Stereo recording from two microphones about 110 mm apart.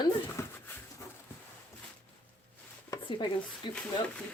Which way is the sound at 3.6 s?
45° left (ahead or behind).